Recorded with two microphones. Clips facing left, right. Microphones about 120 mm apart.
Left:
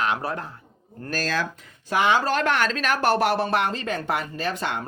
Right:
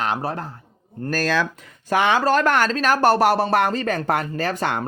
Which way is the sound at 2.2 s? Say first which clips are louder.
Right 5 dB; 40° right (ahead or behind).